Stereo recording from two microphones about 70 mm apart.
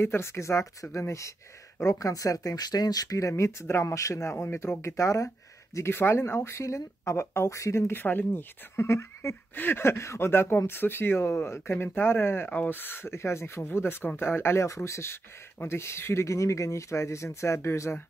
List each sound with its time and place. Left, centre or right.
0.0 s speech: left
2.0 s speech: left
5.8 s speech: left
8.0 s speech: left
9.6 s speech: left